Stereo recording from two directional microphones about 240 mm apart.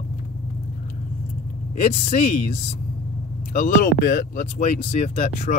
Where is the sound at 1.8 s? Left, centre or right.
Left.